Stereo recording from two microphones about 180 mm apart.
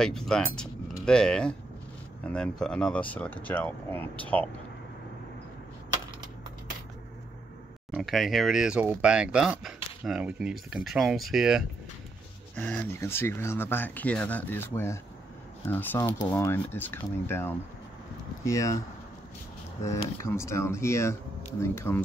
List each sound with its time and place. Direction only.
0.0 s speech: 5° left (ahead or behind)
7.9 s speech: centre (ahead or behind)
12.5 s speech: 10° left (ahead or behind)
19.9 s speech: 15° left (ahead or behind)